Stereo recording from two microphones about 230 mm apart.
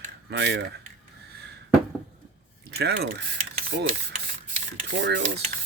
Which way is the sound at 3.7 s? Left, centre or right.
Right.